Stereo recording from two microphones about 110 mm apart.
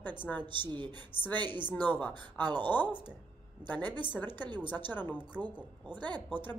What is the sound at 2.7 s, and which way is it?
Speech, 15° left (ahead or behind).